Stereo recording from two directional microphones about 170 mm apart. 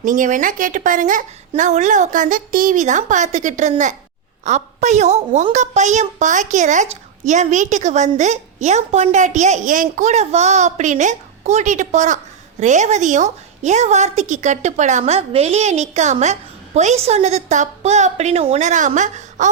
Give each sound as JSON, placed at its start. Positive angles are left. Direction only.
{"t": 0.0, "sound": "a woman's voice", "side_deg": -50}